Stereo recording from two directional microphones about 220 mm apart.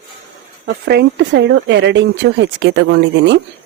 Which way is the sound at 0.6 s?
50° right (ahead or behind).